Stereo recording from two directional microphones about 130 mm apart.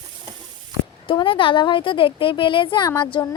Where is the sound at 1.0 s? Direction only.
40° left (ahead or behind).